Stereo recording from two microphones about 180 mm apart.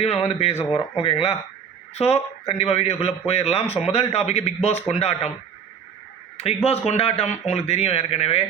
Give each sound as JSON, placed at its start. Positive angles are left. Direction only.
{"t": 0.0, "sound": "a man's voice", "side_deg": 35}
{"t": 6.3, "sound": "a man's voice", "side_deg": 35}